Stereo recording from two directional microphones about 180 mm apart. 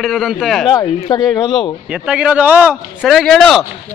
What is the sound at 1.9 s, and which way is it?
A man's voice, 5° right (ahead or behind).